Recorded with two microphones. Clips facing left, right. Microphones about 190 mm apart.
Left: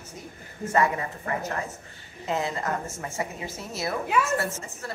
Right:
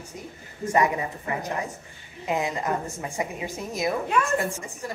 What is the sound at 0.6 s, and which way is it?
A woman's voice, 15° right (ahead or behind).